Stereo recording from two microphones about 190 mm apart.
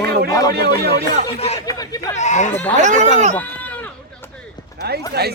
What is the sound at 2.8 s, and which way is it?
Speech, 40° right (ahead or behind).